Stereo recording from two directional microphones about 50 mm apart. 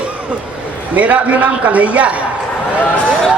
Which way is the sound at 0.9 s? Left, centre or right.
Right.